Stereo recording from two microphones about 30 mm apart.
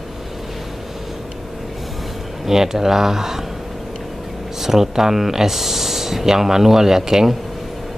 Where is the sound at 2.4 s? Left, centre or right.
Centre.